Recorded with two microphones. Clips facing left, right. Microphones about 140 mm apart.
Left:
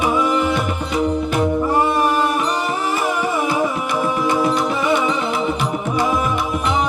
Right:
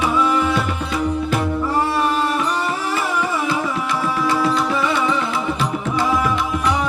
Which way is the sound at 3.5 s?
50° left (ahead or behind).